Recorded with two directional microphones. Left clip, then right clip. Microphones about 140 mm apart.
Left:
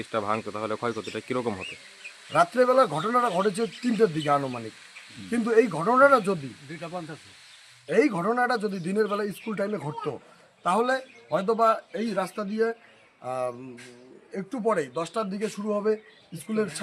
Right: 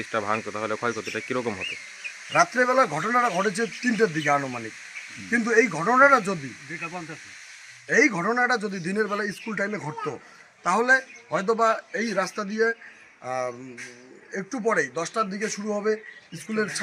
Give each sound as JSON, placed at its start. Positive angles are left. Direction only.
{"t": 0.0, "sound": "speech", "side_deg": 10}
{"t": 2.3, "sound": "a man's voice", "side_deg": 20}
{"t": 7.9, "sound": "a man's voice", "side_deg": 20}